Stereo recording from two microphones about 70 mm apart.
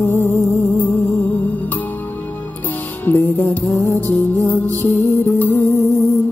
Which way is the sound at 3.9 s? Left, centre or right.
Left.